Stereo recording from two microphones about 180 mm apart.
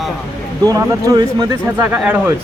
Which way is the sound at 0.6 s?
20° right (ahead or behind).